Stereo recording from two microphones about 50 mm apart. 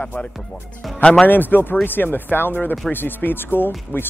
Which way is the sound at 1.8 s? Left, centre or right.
Left.